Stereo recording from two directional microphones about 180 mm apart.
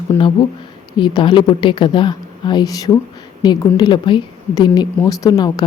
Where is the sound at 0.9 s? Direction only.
25° left (ahead or behind).